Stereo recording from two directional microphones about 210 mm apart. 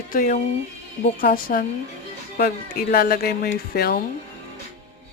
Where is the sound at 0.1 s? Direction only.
40° left (ahead or behind).